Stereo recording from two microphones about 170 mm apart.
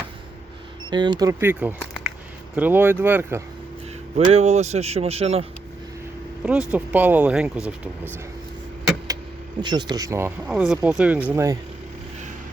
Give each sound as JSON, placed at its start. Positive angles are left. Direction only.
{"t": 0.9, "sound": "speech", "side_deg": -25}
{"t": 4.3, "sound": "speech", "side_deg": -40}
{"t": 6.4, "sound": "speech", "side_deg": -5}
{"t": 9.6, "sound": "speech", "side_deg": -25}
{"t": 10.5, "sound": "speech", "side_deg": -5}